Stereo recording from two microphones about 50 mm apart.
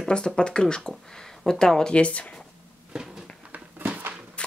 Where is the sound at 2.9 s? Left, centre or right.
Centre.